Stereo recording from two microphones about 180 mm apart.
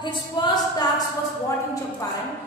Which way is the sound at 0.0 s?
25° left (ahead or behind).